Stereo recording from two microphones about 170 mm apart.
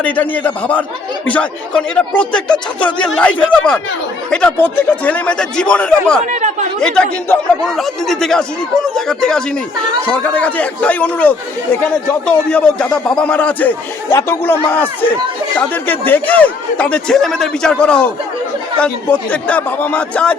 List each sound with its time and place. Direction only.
0.0 s speech: 10° left (ahead or behind)
6.3 s speech: 45° right (ahead or behind)
6.7 s speech: 5° left (ahead or behind)
19.3 s speech: 10° left (ahead or behind)